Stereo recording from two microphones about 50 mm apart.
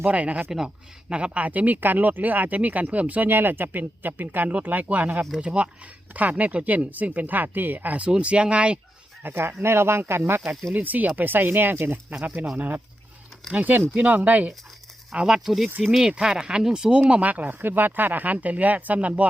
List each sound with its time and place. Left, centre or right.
0.0 s speech: right
3.2 s speech: right
9.2 s speech: right
10.8 s speech: right
12.2 s speech: right
15.1 s speech: centre
15.4 s speech: centre
17.0 s speech: right